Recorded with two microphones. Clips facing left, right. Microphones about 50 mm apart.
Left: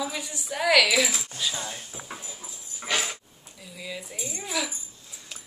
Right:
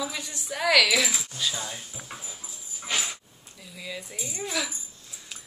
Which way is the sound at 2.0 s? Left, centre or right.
Centre.